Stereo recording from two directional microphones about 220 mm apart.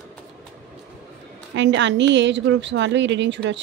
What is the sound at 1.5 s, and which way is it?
A woman's voice, 55° right (ahead or behind).